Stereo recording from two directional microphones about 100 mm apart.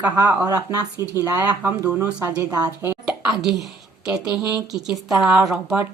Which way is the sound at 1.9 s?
20° right (ahead or behind).